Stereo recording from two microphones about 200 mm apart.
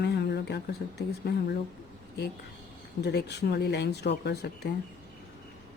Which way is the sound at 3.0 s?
55° left (ahead or behind).